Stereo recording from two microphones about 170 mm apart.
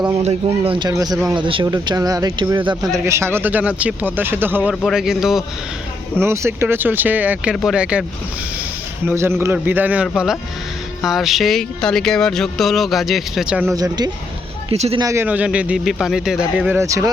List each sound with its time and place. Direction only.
0.3 s speech: 35° right (ahead or behind)
1.1 s speech: 5° right (ahead or behind)
1.4 s speech: 30° right (ahead or behind)
3.1 s speech: 15° right (ahead or behind)
4.7 s speech: centre (ahead or behind)
6.1 s speech: 15° right (ahead or behind)
9.0 s speech: 15° right (ahead or behind)
13.7 s speech: 25° right (ahead or behind)
14.7 s speech: 35° right (ahead or behind)
15.0 s speech: 15° right (ahead or behind)